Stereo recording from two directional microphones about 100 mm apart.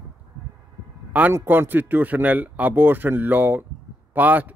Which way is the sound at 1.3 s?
25° right (ahead or behind).